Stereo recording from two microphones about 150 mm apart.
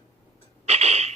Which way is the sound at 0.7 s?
45° right (ahead or behind).